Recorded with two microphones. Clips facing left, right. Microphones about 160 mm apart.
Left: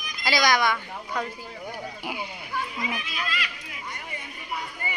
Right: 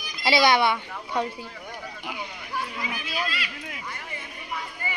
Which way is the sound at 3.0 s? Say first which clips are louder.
Right 2 dB; 35° right (ahead or behind).